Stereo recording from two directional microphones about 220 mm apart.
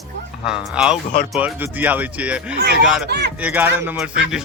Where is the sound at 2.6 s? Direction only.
50° right (ahead or behind).